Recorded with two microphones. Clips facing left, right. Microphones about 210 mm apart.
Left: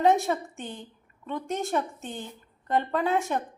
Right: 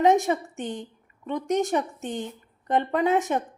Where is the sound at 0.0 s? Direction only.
15° right (ahead or behind).